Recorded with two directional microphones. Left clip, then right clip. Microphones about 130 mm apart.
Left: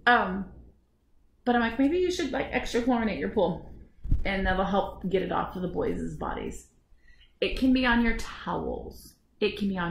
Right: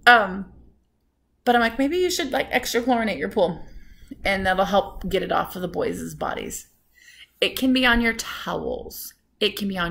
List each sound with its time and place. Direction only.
1.4 s a woman's voice: 20° right (ahead or behind)